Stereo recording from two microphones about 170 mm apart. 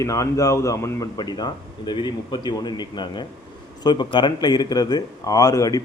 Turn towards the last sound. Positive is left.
turn(degrees=20)  # may be behind; listen again after turning